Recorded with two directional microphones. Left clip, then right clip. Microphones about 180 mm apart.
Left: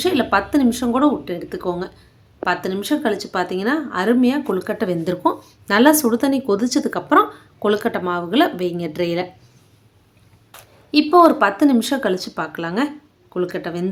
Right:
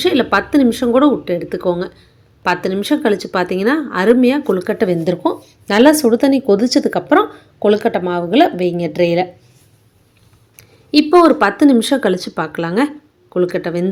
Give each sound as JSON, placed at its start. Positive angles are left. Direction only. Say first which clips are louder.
{"t": 0.0, "sound": "speech", "louder": "right 4 dB", "side_deg": -15}
{"t": 10.6, "sound": "speech", "louder": "right 4 dB", "side_deg": -20}